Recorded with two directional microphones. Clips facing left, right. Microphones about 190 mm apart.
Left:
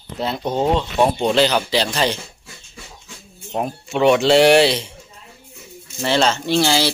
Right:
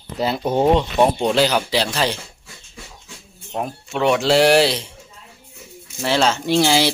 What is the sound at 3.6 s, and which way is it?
Speech, 5° left (ahead or behind).